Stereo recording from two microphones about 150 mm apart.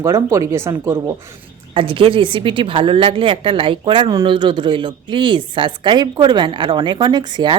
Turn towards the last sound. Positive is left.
turn(degrees=-30)  # may be behind; listen again after turning